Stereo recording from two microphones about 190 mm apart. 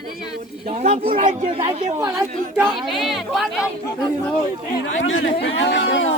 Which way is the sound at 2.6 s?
Centre (ahead or behind).